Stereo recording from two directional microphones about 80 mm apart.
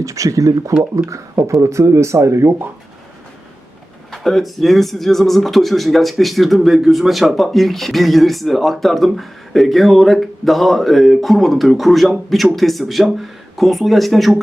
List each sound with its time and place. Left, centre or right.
0.0 s speech: right
4.1 s speech: centre